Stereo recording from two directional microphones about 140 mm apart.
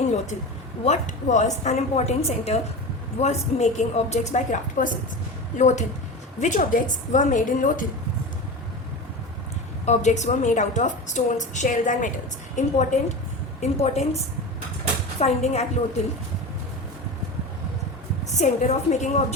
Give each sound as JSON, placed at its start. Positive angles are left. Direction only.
{"t": 0.9, "sound": "a woman's voice", "side_deg": 60}
{"t": 6.4, "sound": "a woman's voice", "side_deg": 70}
{"t": 9.8, "sound": "a woman's voice", "side_deg": 55}
{"t": 13.6, "sound": "a woman's voice", "side_deg": 50}
{"t": 18.3, "sound": "a woman's voice", "side_deg": 55}